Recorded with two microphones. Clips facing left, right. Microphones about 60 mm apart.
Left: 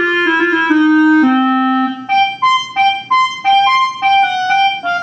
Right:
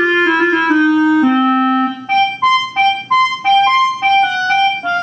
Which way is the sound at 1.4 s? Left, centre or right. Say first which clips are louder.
Even; centre.